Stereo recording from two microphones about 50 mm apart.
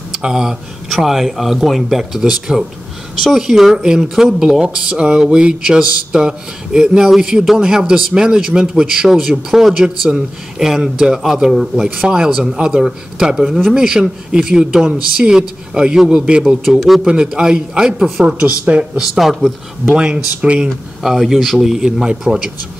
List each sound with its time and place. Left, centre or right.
0.2 s a man's voice: centre
18.9 s speech: centre
19.9 s a man's voice: right
21.0 s speech: centre